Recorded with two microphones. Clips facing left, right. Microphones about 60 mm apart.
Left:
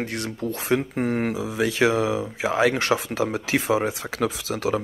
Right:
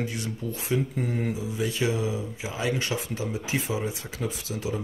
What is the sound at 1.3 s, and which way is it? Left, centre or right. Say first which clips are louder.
Speech: left 6 dB; left.